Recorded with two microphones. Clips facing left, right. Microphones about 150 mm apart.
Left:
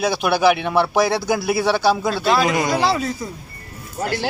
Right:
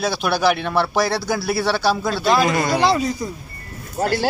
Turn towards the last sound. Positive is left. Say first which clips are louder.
# right 3 dB
turn(degrees=-40)  # may be behind; listen again after turning